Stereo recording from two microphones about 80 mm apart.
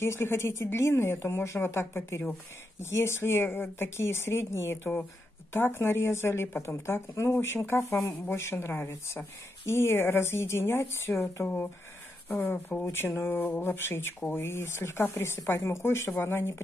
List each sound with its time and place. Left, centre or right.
0.0 s a woman's voice: left